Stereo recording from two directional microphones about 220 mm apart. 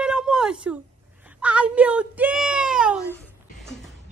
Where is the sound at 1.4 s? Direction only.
5° right (ahead or behind).